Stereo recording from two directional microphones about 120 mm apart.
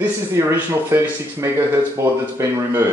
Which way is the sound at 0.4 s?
20° right (ahead or behind).